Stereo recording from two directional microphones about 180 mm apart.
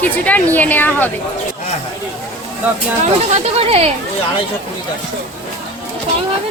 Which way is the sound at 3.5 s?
35° right (ahead or behind).